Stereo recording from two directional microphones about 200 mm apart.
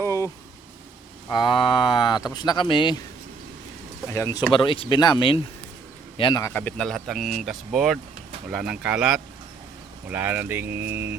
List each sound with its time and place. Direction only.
0.0 s vehicle: 15° left (ahead or behind)
1.3 s speech: 20° left (ahead or behind)
4.1 s speech: 15° left (ahead or behind)
6.4 s speech: 10° left (ahead or behind); by 11.1 s 10° right (ahead or behind)